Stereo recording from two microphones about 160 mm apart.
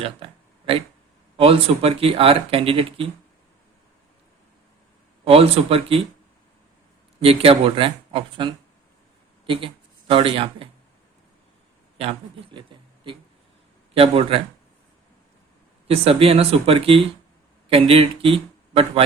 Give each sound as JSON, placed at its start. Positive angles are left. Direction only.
{"t": 0.0, "sound": "a sound", "side_deg": -35}
{"t": 1.4, "sound": "speech", "side_deg": -35}
{"t": 5.2, "sound": "speech", "side_deg": -35}
{"t": 7.2, "sound": "speech", "side_deg": -35}
{"t": 11.9, "sound": "speech", "side_deg": -35}
{"t": 13.9, "sound": "speech", "side_deg": -35}
{"t": 15.9, "sound": "speech", "side_deg": -35}